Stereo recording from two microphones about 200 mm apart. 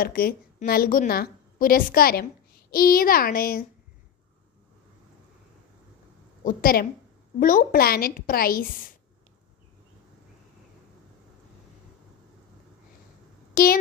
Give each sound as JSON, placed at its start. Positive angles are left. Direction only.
{"t": 0.0, "sound": "a woman's voice", "side_deg": 50}
{"t": 6.4, "sound": "a woman's voice", "side_deg": 45}
{"t": 13.5, "sound": "speech", "side_deg": 45}